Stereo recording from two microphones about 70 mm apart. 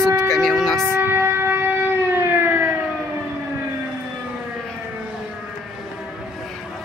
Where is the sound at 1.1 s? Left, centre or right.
Right.